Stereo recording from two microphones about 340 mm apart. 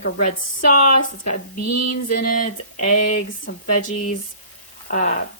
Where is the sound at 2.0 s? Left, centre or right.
Left.